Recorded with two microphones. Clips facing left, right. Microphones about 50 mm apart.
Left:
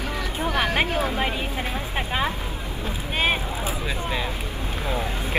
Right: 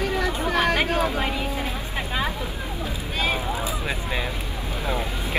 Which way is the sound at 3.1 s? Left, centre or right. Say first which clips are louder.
Left 1 dB; left.